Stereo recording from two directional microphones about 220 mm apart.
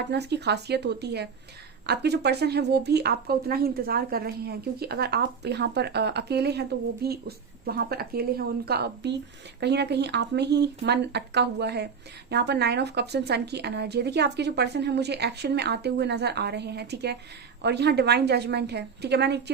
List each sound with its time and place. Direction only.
0.1 s a woman's voice: 50° right (ahead or behind)